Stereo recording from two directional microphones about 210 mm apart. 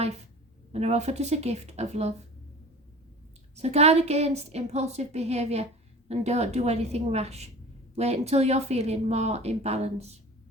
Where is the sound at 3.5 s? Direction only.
30° right (ahead or behind).